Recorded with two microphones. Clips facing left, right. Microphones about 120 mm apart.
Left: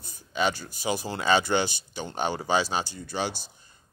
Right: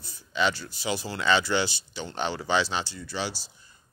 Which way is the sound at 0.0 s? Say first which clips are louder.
Even; 50° left (ahead or behind).